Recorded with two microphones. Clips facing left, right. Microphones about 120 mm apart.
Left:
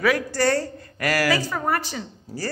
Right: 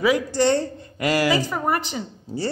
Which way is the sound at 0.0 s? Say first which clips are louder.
Right 2 dB; 20° right (ahead or behind).